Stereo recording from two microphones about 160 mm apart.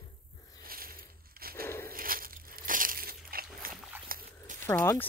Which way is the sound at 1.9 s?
65° right (ahead or behind).